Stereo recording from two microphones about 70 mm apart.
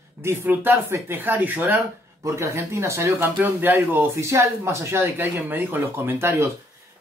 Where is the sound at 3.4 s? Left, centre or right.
Right.